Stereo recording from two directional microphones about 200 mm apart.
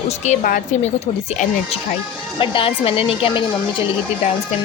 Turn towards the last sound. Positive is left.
turn(degrees=25)  # may be behind; listen again after turning